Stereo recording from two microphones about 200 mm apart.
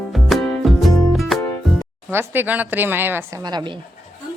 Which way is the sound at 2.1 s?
10° right (ahead or behind).